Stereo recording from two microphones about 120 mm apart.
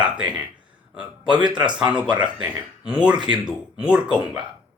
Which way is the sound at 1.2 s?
40° right (ahead or behind).